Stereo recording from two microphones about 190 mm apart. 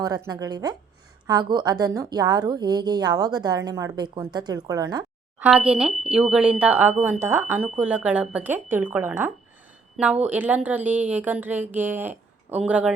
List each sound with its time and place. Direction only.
0.0 s a woman's voice: 20° right (ahead or behind)
5.4 s speech: 5° right (ahead or behind)